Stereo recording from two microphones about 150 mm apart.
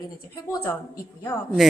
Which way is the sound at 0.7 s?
20° left (ahead or behind).